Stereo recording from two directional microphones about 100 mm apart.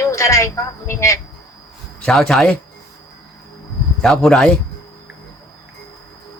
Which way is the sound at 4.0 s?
5° left (ahead or behind).